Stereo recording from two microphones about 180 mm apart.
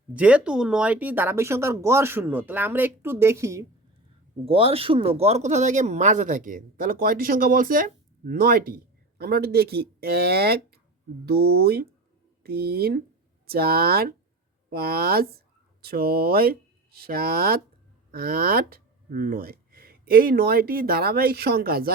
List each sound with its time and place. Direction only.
0.1 s speech: 5° right (ahead or behind)
4.4 s speech: 30° right (ahead or behind); by 21.9 s 55° right (ahead or behind)